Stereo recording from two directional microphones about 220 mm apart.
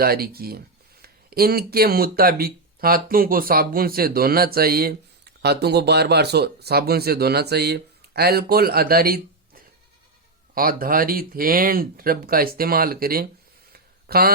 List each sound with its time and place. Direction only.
0.0 s speech: 45° right (ahead or behind)
10.5 s speech: 40° right (ahead or behind)
13.7 s a sound: 45° right (ahead or behind)